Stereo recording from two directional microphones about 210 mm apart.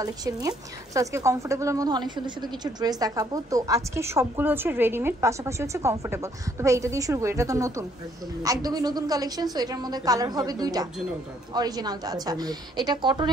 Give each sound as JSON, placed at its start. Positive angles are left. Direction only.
{"t": 0.0, "sound": "a woman's voice", "side_deg": -15}